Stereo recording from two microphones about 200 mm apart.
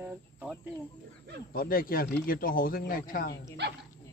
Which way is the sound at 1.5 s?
45° left (ahead or behind).